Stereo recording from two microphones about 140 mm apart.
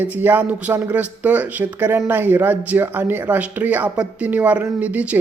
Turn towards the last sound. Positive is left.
turn(degrees=-10)  # may be behind; listen again after turning